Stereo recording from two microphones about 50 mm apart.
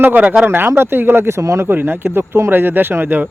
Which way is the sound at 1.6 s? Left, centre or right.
Right.